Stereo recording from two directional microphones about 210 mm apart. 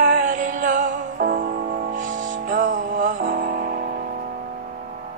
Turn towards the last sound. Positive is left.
turn(degrees=-40)  # may be behind; listen again after turning